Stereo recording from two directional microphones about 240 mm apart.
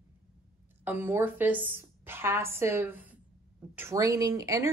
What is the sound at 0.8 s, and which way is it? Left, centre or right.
A woman's voice, centre.